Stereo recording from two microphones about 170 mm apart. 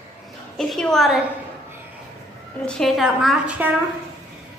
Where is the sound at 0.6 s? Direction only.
5° left (ahead or behind).